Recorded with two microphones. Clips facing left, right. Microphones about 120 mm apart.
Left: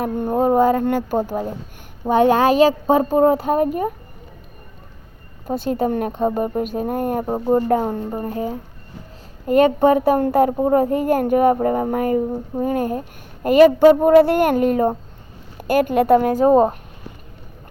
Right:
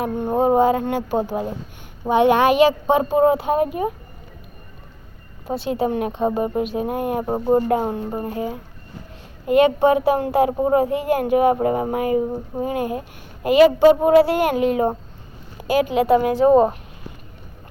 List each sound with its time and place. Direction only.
0.0 s speech: 45° left (ahead or behind)
5.5 s speech: 45° left (ahead or behind)
9.5 s speech: 45° left (ahead or behind)